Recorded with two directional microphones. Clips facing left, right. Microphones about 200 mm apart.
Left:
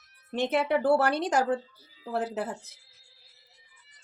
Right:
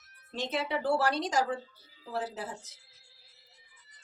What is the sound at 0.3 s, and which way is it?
Speech, 60° left (ahead or behind).